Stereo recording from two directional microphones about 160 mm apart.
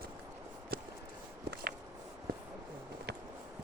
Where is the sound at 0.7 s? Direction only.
70° right (ahead or behind).